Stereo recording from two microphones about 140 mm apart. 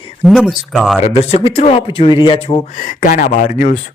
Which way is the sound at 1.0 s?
45° left (ahead or behind).